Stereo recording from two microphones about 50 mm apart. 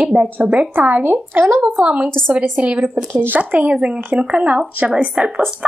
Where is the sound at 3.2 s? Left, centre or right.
Right.